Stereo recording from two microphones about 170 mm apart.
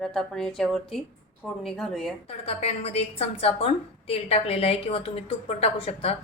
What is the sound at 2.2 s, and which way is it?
A woman's voice, 35° left (ahead or behind).